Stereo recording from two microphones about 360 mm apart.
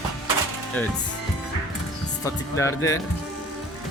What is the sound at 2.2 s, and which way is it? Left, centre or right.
Speech, centre.